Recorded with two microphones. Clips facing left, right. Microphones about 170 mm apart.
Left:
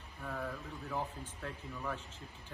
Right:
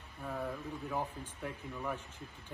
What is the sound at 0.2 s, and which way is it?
Speech, 15° right (ahead or behind).